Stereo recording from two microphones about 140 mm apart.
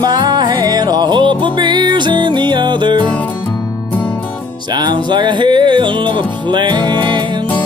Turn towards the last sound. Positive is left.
turn(degrees=-30)  # may be behind; listen again after turning